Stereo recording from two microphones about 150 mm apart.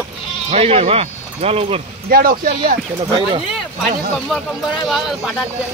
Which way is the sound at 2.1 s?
75° right (ahead or behind).